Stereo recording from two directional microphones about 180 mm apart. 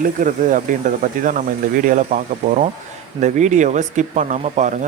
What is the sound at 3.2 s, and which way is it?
Speech, 40° right (ahead or behind).